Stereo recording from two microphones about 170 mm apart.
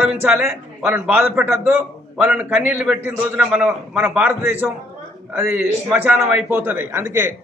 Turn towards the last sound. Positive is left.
turn(degrees=-15)  # may be behind; listen again after turning